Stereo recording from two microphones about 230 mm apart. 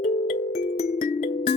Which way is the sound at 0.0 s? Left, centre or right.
Left.